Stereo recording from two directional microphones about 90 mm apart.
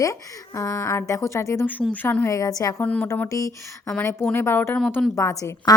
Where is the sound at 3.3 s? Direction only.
35° left (ahead or behind).